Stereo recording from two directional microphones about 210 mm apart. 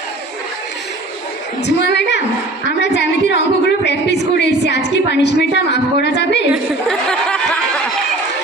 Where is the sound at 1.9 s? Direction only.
55° left (ahead or behind).